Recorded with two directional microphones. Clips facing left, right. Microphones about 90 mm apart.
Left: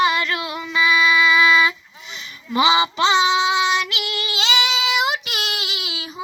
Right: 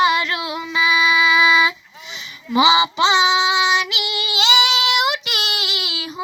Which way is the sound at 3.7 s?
5° right (ahead or behind).